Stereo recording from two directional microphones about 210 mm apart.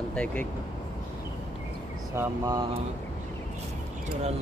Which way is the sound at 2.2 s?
15° right (ahead or behind).